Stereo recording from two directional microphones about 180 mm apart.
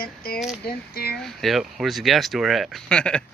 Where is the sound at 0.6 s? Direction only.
60° left (ahead or behind).